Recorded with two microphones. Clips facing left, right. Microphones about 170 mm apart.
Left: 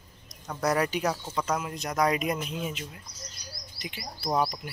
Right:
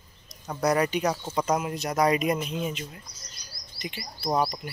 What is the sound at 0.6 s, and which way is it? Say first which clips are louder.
Speech: right 2 dB; centre (ahead or behind).